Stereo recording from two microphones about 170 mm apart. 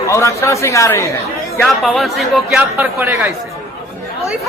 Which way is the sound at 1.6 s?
Centre (ahead or behind).